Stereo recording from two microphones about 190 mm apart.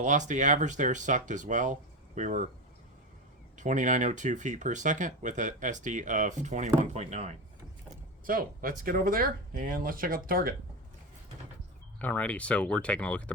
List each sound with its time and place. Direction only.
0.0 s speech: 40° right (ahead or behind)
3.6 s speech: 40° right (ahead or behind)
8.3 s speech: 45° right (ahead or behind)
11.9 s speech: 10° left (ahead or behind)